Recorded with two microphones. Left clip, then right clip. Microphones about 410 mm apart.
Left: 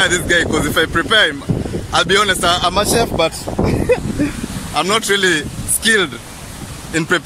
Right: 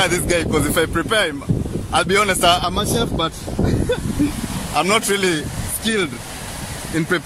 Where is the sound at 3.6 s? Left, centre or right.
Left.